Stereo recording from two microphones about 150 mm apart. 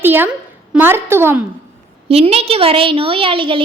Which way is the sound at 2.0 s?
40° right (ahead or behind).